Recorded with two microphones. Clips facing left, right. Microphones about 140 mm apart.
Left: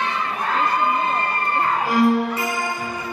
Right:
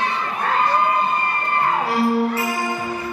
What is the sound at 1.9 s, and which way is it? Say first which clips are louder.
Music: left 4 dB; 30° right (ahead or behind).